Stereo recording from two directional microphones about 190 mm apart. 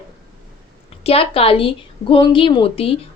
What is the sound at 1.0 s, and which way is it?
A woman's voice, 30° left (ahead or behind).